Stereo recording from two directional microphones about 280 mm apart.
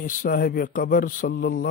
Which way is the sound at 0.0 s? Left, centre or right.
Left.